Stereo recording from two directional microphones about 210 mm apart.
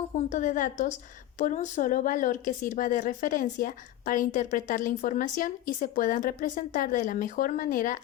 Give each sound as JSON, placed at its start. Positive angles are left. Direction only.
{"t": 0.3, "sound": "a woman's voice", "side_deg": 35}